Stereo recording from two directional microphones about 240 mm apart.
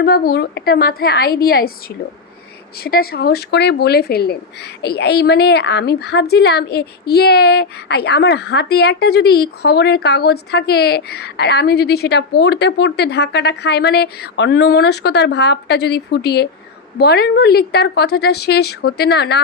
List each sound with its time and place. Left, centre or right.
0.0 s speech: left
2.8 s a woman's voice: left